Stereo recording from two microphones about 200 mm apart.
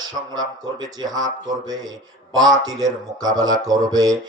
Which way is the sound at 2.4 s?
20° right (ahead or behind).